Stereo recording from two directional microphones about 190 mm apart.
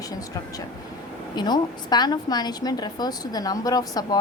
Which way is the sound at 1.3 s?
20° left (ahead or behind).